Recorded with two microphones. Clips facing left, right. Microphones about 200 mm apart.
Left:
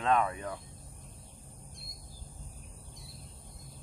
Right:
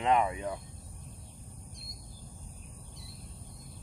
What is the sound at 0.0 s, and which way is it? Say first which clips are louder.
Speech: right 1 dB; 20° right (ahead or behind).